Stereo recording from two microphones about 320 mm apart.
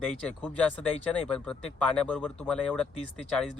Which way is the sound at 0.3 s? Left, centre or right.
Centre.